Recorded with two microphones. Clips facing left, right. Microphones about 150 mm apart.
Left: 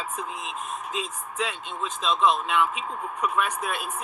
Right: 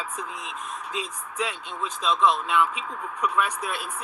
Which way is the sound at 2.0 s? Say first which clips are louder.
Even; 20° left (ahead or behind).